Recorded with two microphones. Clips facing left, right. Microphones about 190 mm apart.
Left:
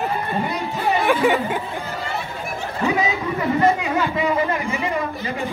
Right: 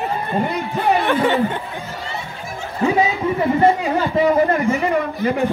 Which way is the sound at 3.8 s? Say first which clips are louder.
Right 4 dB; 35° right (ahead or behind).